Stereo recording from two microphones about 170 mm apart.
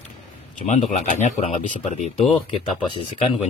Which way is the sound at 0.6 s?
45° left (ahead or behind).